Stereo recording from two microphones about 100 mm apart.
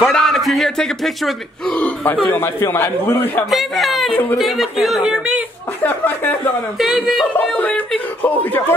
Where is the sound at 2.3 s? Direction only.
20° left (ahead or behind).